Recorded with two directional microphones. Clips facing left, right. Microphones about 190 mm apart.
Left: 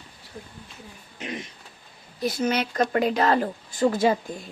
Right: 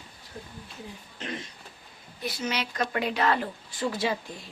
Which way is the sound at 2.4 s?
50° left (ahead or behind).